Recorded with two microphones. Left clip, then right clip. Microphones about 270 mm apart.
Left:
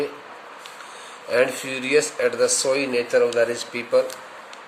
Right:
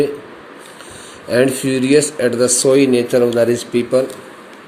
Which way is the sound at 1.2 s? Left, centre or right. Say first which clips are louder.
Right 6 dB; centre.